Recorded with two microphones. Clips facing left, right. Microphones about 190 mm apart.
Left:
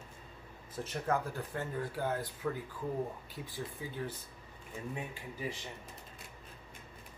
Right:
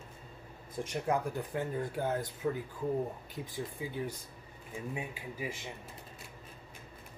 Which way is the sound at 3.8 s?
15° right (ahead or behind).